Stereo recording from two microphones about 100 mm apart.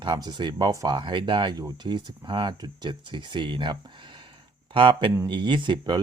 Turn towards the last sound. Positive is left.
turn(degrees=-50)  # may be behind; listen again after turning